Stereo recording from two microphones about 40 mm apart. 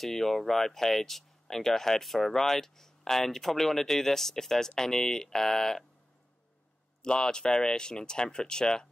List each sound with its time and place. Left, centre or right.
0.0 s speech: centre
7.0 s speech: centre